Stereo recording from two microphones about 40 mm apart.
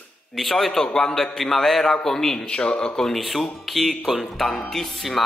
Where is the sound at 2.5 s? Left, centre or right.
Left.